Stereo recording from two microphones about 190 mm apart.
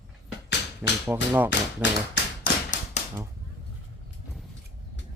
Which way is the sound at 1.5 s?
70° left (ahead or behind).